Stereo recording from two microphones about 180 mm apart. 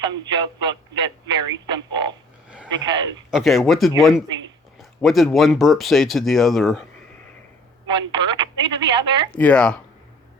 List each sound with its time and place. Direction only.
0.0 s speech: 25° right (ahead or behind)
3.3 s speech: centre (ahead or behind)
7.9 s speech: 25° right (ahead or behind)
9.3 s speech: 5° left (ahead or behind)